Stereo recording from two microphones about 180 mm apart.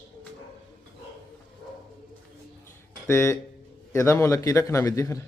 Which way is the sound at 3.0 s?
15° left (ahead or behind).